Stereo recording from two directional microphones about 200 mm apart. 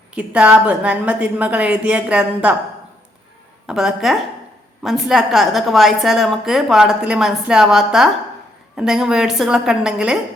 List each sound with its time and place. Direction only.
0.1 s a woman's voice: 5° right (ahead or behind)
3.7 s a woman's voice: centre (ahead or behind)